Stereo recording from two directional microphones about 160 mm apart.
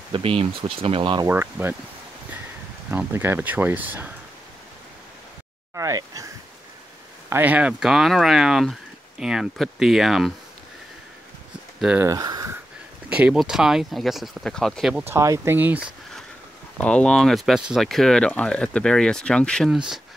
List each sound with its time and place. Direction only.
0.1 s speech: 35° right (ahead or behind)
1.2 s speech: 15° right (ahead or behind)
2.9 s speech: 10° right (ahead or behind)
5.8 s speech: 20° right (ahead or behind)
7.2 s speech: 10° right (ahead or behind)
11.8 s speech: 5° right (ahead or behind)
12.1 s a sound: 25° right (ahead or behind)
13.1 s speech: 5° right (ahead or behind)
15.0 s speech: 20° right (ahead or behind)
16.7 s speech: 5° left (ahead or behind)